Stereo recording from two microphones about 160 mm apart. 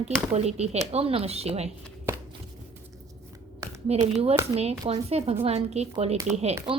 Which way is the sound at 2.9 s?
20° right (ahead or behind).